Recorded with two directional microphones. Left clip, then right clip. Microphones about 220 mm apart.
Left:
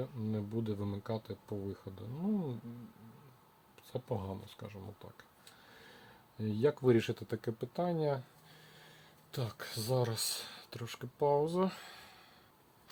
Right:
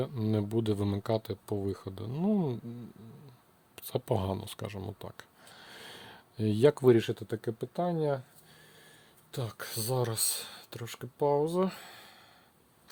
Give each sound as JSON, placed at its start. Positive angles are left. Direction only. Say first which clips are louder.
{"t": 0.0, "sound": "speech", "louder": "right 8 dB", "side_deg": -50}
{"t": 3.8, "sound": "speech", "louder": "right 8 dB", "side_deg": -50}
{"t": 5.7, "sound": "a sound", "louder": "right 11 dB", "side_deg": -50}
{"t": 6.8, "sound": "speech", "louder": "right 6 dB", "side_deg": -25}
{"t": 9.3, "sound": "speech", "louder": "right 3 dB", "side_deg": -25}